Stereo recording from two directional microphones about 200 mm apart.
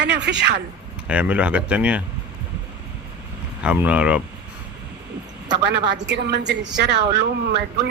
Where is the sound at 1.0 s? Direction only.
5° right (ahead or behind).